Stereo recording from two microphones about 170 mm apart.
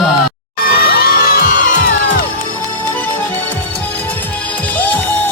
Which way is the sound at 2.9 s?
10° left (ahead or behind).